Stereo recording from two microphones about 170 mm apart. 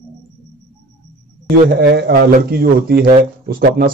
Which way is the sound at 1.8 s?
70° right (ahead or behind).